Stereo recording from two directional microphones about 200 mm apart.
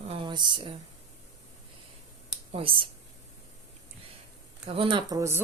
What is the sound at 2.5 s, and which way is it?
Speech, 25° right (ahead or behind).